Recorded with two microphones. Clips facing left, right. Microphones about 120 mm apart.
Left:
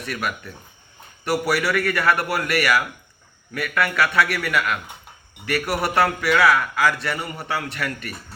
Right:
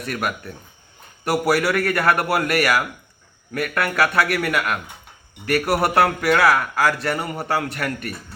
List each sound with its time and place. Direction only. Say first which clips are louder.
0.0 s a man's voice: right 2 dB; 45° right (ahead or behind)